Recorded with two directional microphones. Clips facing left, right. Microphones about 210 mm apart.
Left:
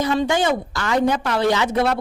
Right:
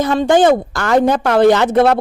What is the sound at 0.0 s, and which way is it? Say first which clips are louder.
A woman's voice: right 7 dB; 50° right (ahead or behind).